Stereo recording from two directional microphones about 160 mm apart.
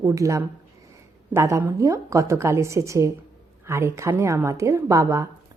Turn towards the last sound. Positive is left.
turn(degrees=-20)  # may be behind; listen again after turning